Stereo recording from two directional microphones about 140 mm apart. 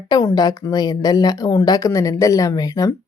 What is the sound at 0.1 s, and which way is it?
A woman's voice, 25° left (ahead or behind).